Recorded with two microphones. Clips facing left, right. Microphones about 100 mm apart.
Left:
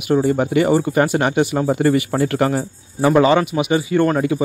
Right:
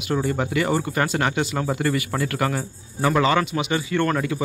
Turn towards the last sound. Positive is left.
turn(degrees=25)  # may be behind; listen again after turning